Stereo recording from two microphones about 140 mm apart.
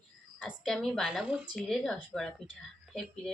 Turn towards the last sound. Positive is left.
turn(degrees=0)  # may be behind; listen again after turning